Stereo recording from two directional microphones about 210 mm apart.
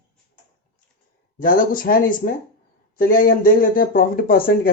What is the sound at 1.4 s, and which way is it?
Speech, 40° left (ahead or behind).